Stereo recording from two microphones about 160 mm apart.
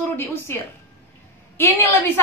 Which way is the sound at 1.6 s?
15° left (ahead or behind).